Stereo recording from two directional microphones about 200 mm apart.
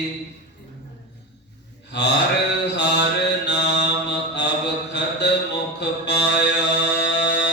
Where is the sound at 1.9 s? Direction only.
55° left (ahead or behind).